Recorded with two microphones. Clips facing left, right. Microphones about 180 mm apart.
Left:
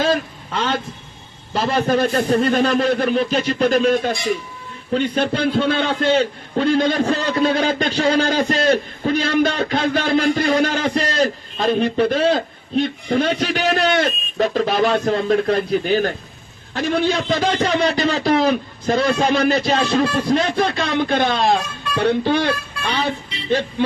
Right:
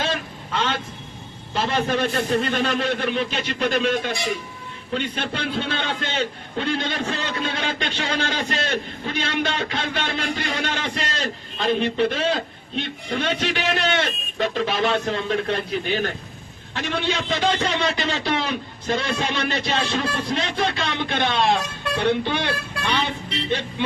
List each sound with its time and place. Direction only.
0.0 s vehicle: 40° left (ahead or behind)
1.5 s a man's voice: 40° left (ahead or behind)